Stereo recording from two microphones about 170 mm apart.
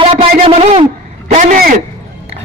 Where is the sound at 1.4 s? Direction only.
55° right (ahead or behind).